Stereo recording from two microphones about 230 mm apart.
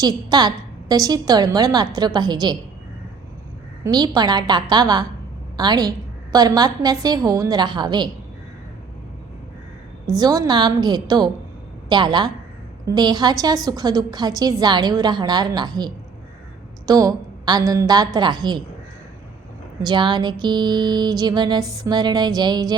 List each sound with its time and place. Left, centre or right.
0.0 s a woman's voice: centre
3.8 s a woman's voice: centre
10.1 s a woman's voice: centre
11.9 s music: centre
12.9 s a woman's voice: centre
19.8 s music: centre
21.8 s a woman's voice: centre